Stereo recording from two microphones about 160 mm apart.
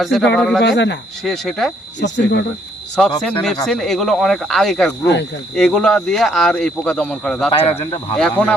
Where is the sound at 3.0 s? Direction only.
Centre (ahead or behind).